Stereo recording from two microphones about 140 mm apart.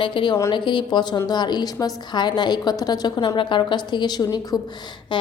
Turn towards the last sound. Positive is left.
turn(degrees=35)  # may be behind; listen again after turning